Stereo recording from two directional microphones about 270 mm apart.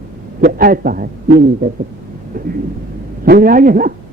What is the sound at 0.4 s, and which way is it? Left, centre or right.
Speech, right.